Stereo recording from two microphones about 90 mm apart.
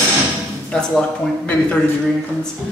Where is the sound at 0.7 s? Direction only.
10° left (ahead or behind).